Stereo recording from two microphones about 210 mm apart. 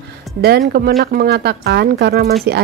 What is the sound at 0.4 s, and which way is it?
Speech, 50° right (ahead or behind).